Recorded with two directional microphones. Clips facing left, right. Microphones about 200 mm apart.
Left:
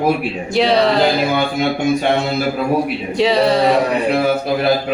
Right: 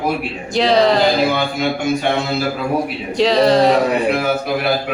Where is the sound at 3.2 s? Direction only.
5° left (ahead or behind).